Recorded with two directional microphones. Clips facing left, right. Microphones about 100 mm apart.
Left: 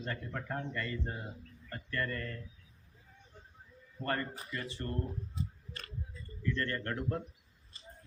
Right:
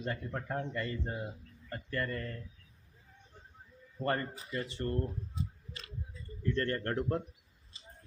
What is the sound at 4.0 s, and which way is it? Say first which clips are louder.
Speech: right 2 dB; 20° right (ahead or behind).